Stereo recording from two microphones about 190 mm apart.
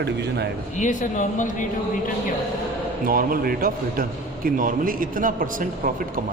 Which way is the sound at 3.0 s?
50° right (ahead or behind).